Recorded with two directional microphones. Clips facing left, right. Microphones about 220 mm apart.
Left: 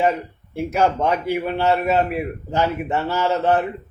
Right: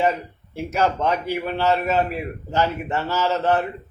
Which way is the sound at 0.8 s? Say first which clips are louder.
Left 2 dB; 15° left (ahead or behind).